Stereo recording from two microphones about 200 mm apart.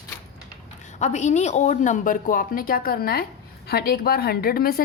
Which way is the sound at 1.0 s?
35° left (ahead or behind).